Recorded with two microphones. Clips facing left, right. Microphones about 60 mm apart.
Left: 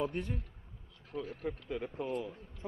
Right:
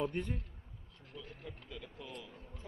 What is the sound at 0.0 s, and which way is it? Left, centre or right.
A man's voice, centre.